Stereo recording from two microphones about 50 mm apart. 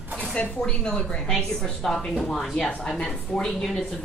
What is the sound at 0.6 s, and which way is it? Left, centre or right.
A woman's voice, centre.